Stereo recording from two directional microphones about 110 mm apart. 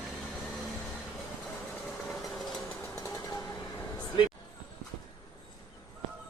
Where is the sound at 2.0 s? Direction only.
Centre (ahead or behind).